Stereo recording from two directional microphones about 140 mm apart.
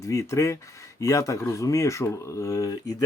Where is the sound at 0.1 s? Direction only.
20° left (ahead or behind).